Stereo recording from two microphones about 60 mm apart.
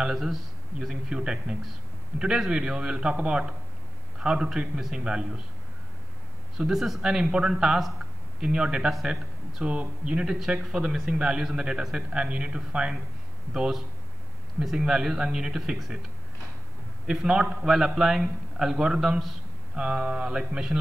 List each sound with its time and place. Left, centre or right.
0.0 s a man's voice: centre
6.6 s a man's voice: centre
10.7 s a man's voice: centre
17.0 s a man's voice: centre